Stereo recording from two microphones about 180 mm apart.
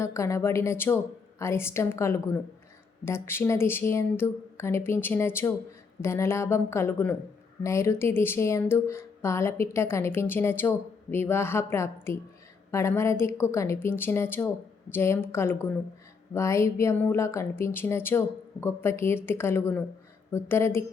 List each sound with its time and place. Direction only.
0.0 s speech: 15° left (ahead or behind)